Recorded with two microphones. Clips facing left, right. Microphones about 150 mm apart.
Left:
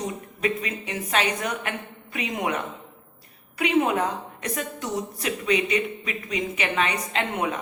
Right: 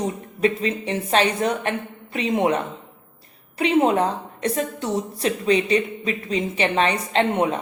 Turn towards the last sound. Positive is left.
turn(degrees=-30)  # may be behind; listen again after turning